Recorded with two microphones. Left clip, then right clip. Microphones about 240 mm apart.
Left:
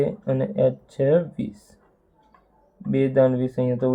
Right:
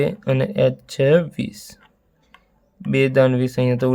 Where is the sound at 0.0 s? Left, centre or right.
Right.